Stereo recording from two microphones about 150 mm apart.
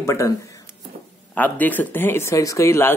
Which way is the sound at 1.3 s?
10° left (ahead or behind).